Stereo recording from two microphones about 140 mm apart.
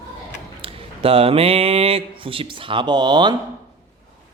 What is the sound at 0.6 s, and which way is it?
Speech, 45° right (ahead or behind).